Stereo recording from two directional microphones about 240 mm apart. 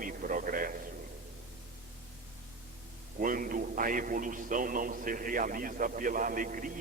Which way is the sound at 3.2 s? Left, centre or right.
Right.